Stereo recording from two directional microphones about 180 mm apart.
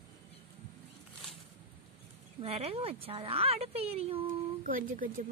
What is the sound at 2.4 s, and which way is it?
A woman's voice, 35° right (ahead or behind).